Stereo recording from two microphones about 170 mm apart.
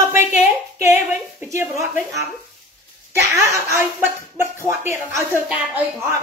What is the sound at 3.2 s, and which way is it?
Speech, 15° right (ahead or behind).